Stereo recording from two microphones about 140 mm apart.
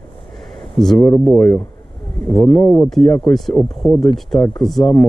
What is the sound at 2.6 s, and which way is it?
Speech, 15° left (ahead or behind).